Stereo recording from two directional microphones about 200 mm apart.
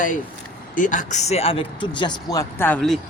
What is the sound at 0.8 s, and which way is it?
A man's voice, 40° left (ahead or behind).